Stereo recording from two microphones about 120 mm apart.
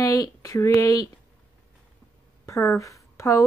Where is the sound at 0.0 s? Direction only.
30° left (ahead or behind).